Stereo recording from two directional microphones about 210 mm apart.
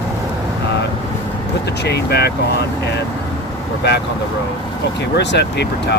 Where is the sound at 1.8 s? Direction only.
50° left (ahead or behind).